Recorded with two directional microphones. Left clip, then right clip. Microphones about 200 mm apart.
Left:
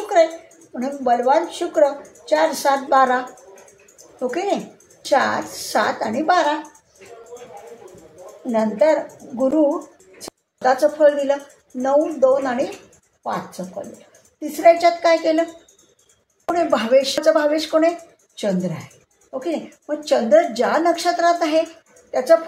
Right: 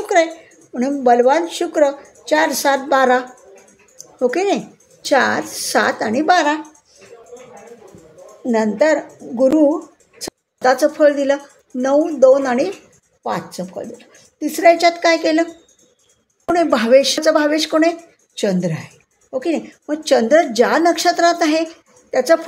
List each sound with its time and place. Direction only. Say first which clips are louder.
0.1 s a sound: even; 55° right (ahead or behind)
0.7 s a woman's voice: right 6 dB; 55° right (ahead or behind)
8.5 s a woman's voice: right 2 dB; 60° right (ahead or behind)
16.5 s a woman's voice: right 4 dB; 55° right (ahead or behind)